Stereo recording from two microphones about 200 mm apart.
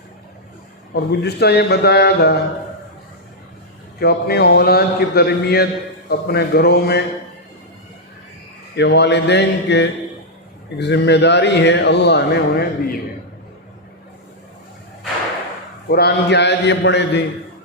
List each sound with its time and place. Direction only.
0.9 s a man's voice: 55° left (ahead or behind)
4.0 s a man's voice: 50° left (ahead or behind)
8.7 s a man's voice: 55° left (ahead or behind)
15.9 s a man's voice: 55° left (ahead or behind)